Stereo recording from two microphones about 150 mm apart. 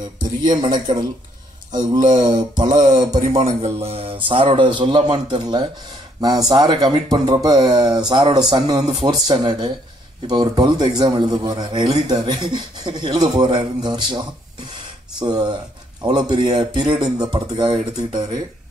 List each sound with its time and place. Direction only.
0.2 s speech: 25° right (ahead or behind)
3.2 s speech: 45° right (ahead or behind); by 17.7 s 30° right (ahead or behind)